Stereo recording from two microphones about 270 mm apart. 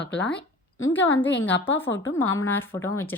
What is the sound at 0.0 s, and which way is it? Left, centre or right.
Speech, left.